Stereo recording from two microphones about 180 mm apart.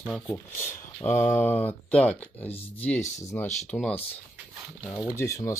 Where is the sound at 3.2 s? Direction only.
10° left (ahead or behind).